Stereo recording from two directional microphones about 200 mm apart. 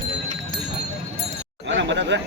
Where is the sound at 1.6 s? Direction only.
65° right (ahead or behind).